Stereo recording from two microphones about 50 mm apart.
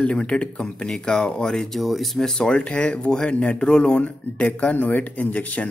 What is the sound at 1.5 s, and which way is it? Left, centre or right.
Speech, centre.